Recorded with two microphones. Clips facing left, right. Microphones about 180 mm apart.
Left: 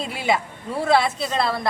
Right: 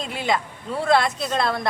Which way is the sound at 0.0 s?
10° left (ahead or behind).